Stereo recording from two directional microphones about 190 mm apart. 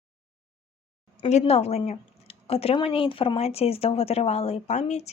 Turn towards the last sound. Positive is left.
turn(degrees=35)  # may be behind; listen again after turning